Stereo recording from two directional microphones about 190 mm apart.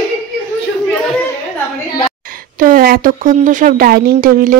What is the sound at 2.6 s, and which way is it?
Speech, 50° right (ahead or behind).